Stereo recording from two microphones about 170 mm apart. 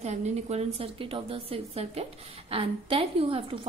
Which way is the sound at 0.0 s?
40° right (ahead or behind).